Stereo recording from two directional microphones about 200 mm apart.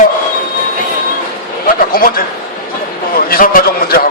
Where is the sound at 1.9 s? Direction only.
45° left (ahead or behind).